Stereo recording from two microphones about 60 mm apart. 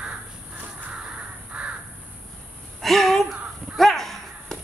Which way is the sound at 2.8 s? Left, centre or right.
Centre.